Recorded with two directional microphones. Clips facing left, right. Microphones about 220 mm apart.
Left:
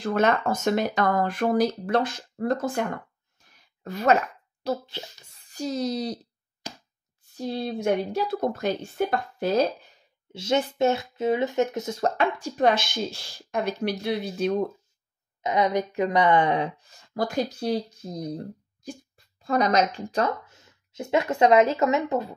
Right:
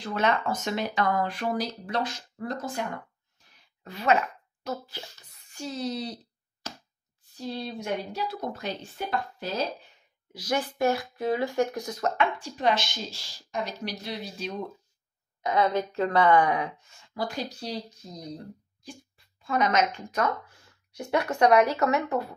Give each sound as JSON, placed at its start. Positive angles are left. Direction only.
{"t": 0.0, "sound": "speech", "side_deg": 45}
{"t": 3.3, "sound": "a sound", "side_deg": 45}
{"t": 4.6, "sound": "a child's voice", "side_deg": 30}
{"t": 7.3, "sound": "speech", "side_deg": 50}
{"t": 10.3, "sound": "speech", "side_deg": 25}
{"t": 15.4, "sound": "speech", "side_deg": 20}
{"t": 18.9, "sound": "speech", "side_deg": 40}